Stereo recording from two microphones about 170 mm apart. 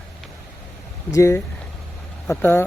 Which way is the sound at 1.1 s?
20° left (ahead or behind).